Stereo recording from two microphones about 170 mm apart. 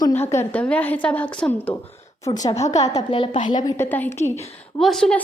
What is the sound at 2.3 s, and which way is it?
Speech, 20° left (ahead or behind).